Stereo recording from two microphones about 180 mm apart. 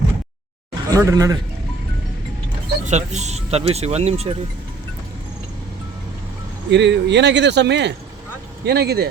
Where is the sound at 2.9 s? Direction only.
40° right (ahead or behind).